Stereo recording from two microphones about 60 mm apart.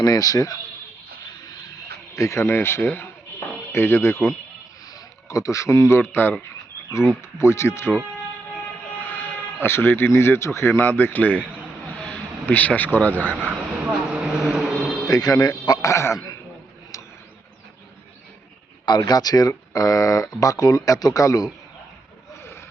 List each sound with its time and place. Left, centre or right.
0.0 s a man's voice: left
2.1 s speech: left
2.4 s speech: left
4.9 s a sound: left
6.0 s speech: left
7.2 s speech: left
9.6 s speech: left
10.7 s speech: left
13.3 s speech: centre
14.3 s a sound: centre
15.1 s a man's voice: left
16.1 s throat clearing: left
19.1 s speech: left
22.4 s vehicle: left